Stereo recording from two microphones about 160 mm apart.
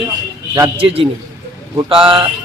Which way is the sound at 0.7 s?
35° right (ahead or behind).